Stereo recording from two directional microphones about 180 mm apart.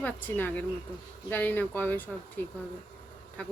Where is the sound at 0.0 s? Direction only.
10° left (ahead or behind).